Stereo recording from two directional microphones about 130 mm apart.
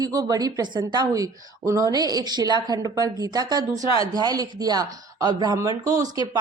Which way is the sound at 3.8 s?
45° left (ahead or behind).